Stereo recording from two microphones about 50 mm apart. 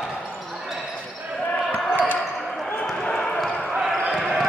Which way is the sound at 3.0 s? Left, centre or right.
Centre.